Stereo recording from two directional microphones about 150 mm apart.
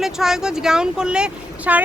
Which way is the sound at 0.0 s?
5° right (ahead or behind).